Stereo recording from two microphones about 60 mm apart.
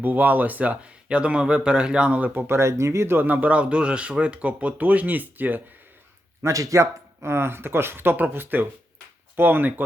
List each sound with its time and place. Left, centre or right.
0.0 s speech: right
2.3 s speech: right
3.2 s speech: right
6.4 s speech: right